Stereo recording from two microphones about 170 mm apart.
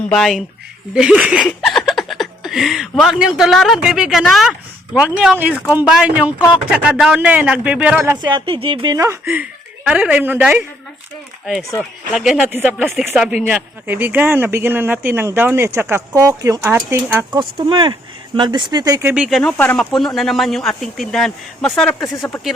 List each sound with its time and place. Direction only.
0.1 s a man's voice: centre (ahead or behind)
8.1 s speech: 25° right (ahead or behind)
12.1 s a man's voice: 5° right (ahead or behind)
12.8 s a man's voice: centre (ahead or behind)
17.3 s speech: 25° right (ahead or behind)
19.1 s speech: 5° right (ahead or behind)
19.4 s a man's voice: 10° left (ahead or behind)